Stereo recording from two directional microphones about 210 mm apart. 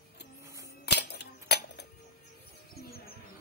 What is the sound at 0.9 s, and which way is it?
Music, 50° left (ahead or behind).